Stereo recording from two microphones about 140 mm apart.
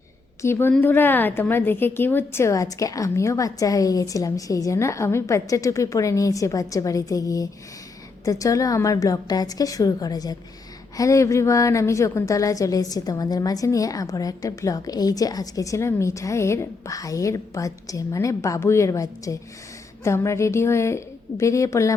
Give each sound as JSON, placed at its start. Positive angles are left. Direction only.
{"t": 0.4, "sound": "a woman's voice", "side_deg": 15}